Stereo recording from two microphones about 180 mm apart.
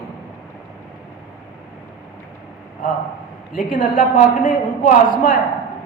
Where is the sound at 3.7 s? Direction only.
50° left (ahead or behind).